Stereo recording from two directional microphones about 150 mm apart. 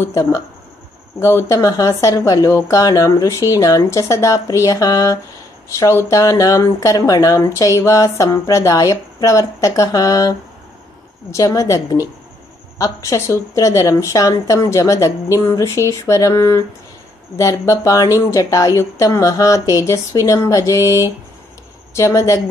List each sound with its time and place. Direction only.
0.1 s speech: 20° left (ahead or behind)
11.3 s speech: 20° left (ahead or behind)